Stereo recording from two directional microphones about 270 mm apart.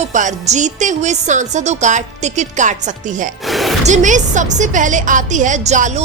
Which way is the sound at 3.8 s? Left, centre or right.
Right.